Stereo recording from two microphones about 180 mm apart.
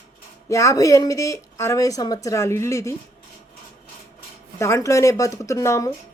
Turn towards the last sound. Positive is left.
turn(degrees=15)  # may be behind; listen again after turning